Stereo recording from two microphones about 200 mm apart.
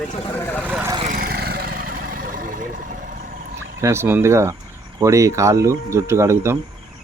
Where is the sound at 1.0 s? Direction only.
45° right (ahead or behind).